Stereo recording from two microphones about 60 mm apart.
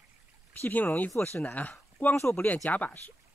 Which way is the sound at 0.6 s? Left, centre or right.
Left.